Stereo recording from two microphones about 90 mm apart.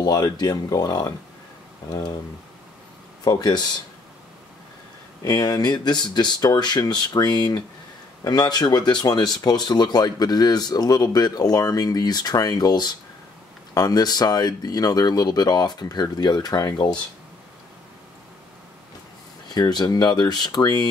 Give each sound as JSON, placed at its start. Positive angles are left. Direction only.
{"t": 0.0, "sound": "speech", "side_deg": 50}
{"t": 3.3, "sound": "speech", "side_deg": 50}
{"t": 5.2, "sound": "speech", "side_deg": 45}
{"t": 19.5, "sound": "speech", "side_deg": 50}